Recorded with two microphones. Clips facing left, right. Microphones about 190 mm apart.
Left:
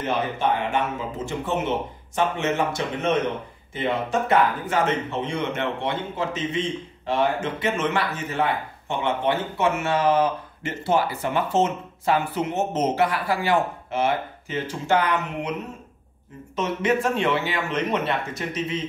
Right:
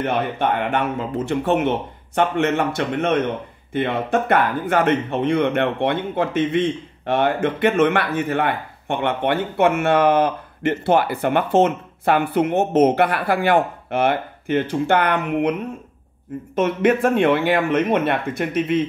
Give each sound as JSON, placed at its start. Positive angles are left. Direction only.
{"t": 0.0, "sound": "speech", "side_deg": -60}
{"t": 16.5, "sound": "speech", "side_deg": -55}